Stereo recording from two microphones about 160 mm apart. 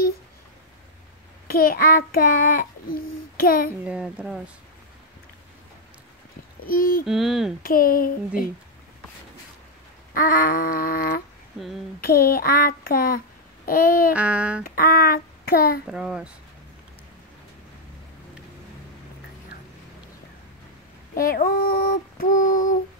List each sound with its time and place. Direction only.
1.5 s a child's voice: 65° left (ahead or behind)
3.8 s a woman's voice: 5° right (ahead or behind)
6.6 s female singing: 65° left (ahead or behind)
7.1 s speech: centre (ahead or behind)
7.6 s female singing: 65° left (ahead or behind)
10.1 s female singing: 60° left (ahead or behind)
12.0 s a child's voice: 70° left (ahead or behind)
13.7 s female singing: 65° left (ahead or behind)
14.1 s a woman's voice: 10° right (ahead or behind)
14.6 s a child's voice: 65° left (ahead or behind)
15.9 s speech: 5° right (ahead or behind)
21.1 s female singing: 60° left (ahead or behind)